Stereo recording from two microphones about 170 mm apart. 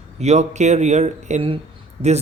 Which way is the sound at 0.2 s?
40° right (ahead or behind).